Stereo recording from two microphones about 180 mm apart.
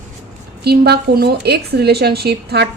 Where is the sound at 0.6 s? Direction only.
65° right (ahead or behind).